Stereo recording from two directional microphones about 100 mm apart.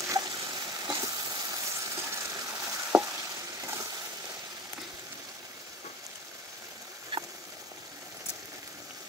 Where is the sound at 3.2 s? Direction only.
30° right (ahead or behind).